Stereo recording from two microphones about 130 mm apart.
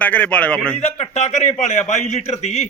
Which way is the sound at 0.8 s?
55° left (ahead or behind).